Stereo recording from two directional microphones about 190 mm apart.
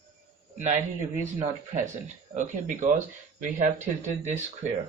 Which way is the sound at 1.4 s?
35° right (ahead or behind).